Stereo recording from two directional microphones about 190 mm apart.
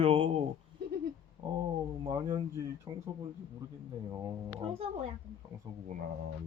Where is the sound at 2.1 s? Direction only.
15° right (ahead or behind).